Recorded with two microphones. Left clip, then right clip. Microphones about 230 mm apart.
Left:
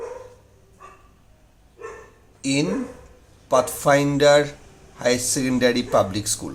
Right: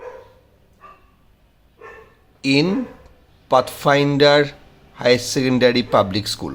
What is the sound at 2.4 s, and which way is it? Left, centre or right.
Speech, right.